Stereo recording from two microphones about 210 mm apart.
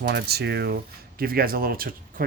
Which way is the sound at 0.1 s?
50° right (ahead or behind).